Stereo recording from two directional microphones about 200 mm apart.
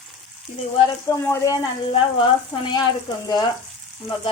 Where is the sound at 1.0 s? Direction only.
15° left (ahead or behind).